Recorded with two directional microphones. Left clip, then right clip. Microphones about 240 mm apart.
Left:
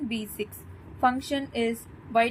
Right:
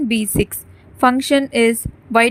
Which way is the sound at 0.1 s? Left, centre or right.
Right.